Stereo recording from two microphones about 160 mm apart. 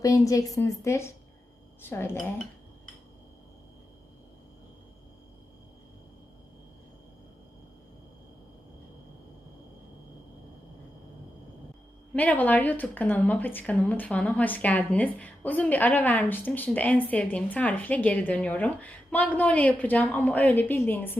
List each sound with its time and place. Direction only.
0.0 s a woman's voice: 20° left (ahead or behind)
12.1 s speech: 10° left (ahead or behind)